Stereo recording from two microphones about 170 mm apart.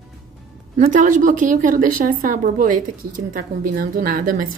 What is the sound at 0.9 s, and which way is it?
A woman's voice, 50° right (ahead or behind).